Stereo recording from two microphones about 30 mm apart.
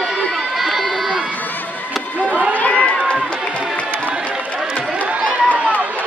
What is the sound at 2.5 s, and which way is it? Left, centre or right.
Run, left.